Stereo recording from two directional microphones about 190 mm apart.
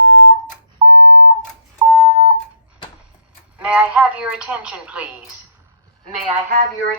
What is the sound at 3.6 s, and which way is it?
Speech, 5° right (ahead or behind).